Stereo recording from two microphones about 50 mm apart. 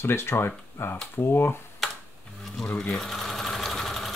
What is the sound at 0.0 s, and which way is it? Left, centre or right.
Speech, left.